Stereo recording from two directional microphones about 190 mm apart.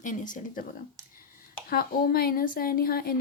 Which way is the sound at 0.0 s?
40° left (ahead or behind).